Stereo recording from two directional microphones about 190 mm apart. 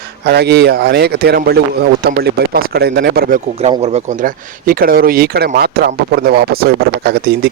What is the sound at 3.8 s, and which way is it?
Speech, 35° right (ahead or behind).